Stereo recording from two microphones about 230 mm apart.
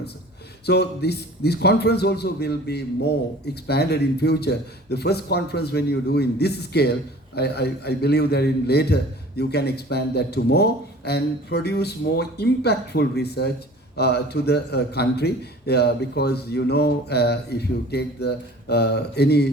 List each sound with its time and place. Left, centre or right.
0.6 s a man's voice: left